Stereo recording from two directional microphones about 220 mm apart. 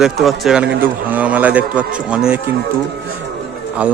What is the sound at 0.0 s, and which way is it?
Speech, centre (ahead or behind).